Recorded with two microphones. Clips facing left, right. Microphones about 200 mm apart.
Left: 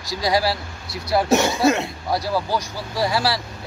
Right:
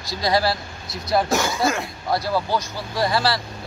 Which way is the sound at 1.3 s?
20° left (ahead or behind).